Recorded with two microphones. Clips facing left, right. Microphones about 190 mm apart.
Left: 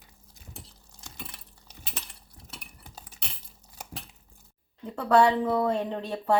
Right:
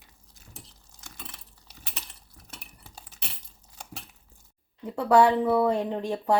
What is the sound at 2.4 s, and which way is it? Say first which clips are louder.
Stir: left 3 dB; 25° left (ahead or behind).